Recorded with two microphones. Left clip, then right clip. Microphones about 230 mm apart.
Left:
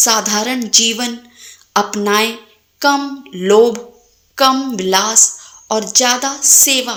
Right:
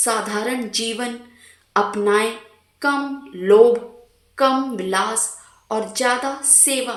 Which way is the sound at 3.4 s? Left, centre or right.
Left.